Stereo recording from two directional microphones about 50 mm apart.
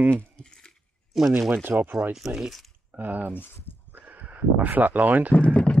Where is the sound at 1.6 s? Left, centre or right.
Right.